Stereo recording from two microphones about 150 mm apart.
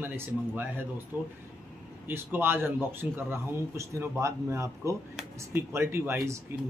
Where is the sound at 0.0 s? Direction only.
15° right (ahead or behind).